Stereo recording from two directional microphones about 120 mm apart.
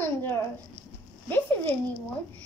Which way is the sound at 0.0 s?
20° left (ahead or behind).